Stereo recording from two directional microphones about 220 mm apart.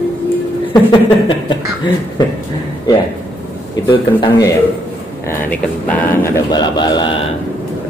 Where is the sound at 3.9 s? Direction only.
15° left (ahead or behind).